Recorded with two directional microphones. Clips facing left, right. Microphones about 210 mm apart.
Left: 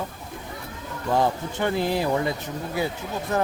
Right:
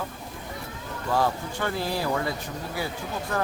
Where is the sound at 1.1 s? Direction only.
20° left (ahead or behind).